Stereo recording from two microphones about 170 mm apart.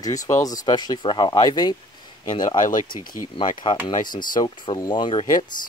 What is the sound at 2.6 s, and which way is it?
Speech, 50° left (ahead or behind).